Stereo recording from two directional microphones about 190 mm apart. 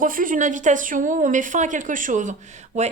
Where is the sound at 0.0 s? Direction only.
45° right (ahead or behind).